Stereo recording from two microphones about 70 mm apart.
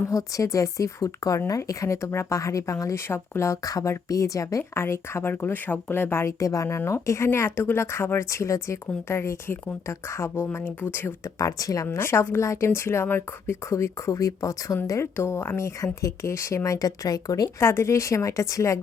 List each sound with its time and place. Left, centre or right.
0.1 s speech: left
6.4 s speech: left
11.3 s speech: left
11.9 s speech: left
16.7 s speech: left
17.6 s speech: left